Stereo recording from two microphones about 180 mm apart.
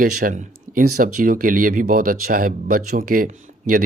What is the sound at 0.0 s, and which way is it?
Speech, 45° right (ahead or behind).